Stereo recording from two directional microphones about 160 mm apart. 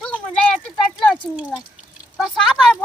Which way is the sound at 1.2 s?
5° right (ahead or behind).